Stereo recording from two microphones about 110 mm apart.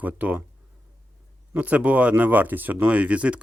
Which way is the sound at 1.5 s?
15° right (ahead or behind).